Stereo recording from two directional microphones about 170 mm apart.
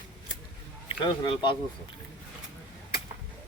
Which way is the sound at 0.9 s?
30° left (ahead or behind).